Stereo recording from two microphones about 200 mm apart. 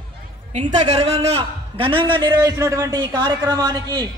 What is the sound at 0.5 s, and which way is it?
A man's voice, 35° right (ahead or behind).